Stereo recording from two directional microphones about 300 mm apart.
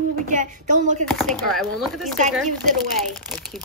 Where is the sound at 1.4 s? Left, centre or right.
Centre.